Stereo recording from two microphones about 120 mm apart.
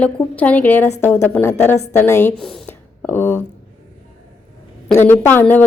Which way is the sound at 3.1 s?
15° left (ahead or behind).